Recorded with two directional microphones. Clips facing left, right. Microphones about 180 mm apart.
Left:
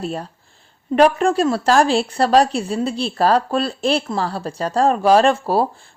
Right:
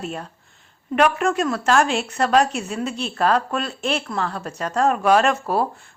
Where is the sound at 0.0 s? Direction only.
35° left (ahead or behind).